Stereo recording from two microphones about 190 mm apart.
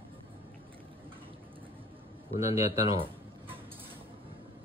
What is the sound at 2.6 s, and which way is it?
Speech, 35° left (ahead or behind).